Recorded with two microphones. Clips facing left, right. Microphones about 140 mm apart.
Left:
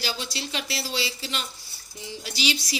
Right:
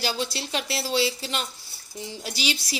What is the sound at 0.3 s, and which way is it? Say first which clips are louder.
Speech: right 2 dB; 50° right (ahead or behind).